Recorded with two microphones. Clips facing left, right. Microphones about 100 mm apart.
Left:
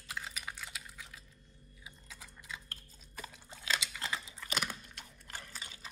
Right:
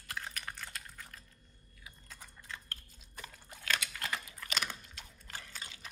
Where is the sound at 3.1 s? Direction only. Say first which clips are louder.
Left 2 dB; 25° left (ahead or behind).